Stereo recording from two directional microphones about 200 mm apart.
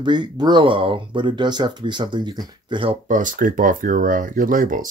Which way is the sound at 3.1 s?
40° right (ahead or behind).